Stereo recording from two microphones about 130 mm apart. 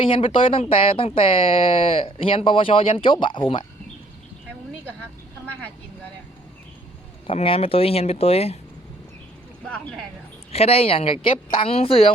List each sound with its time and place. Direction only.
0.0 s speech: 45° left (ahead or behind)
7.3 s speech: 45° left (ahead or behind)
9.6 s speech: 5° left (ahead or behind)
10.5 s speech: 50° left (ahead or behind)